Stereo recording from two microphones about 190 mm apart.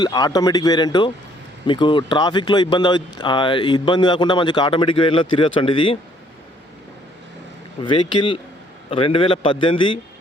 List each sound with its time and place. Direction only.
0.0 s speech: 20° left (ahead or behind)
7.8 s speech: 25° left (ahead or behind)